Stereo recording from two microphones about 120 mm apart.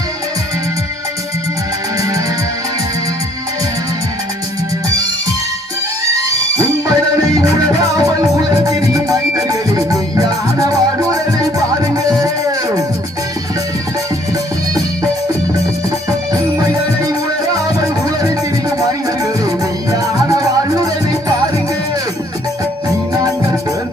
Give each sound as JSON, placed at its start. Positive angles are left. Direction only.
{"t": 6.6, "sound": "music", "side_deg": -30}
{"t": 20.1, "sound": "music", "side_deg": -30}